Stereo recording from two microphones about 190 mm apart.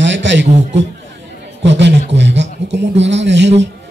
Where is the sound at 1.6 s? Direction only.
65° right (ahead or behind).